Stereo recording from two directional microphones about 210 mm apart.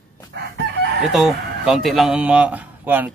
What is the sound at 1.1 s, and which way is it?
Speech, centre (ahead or behind).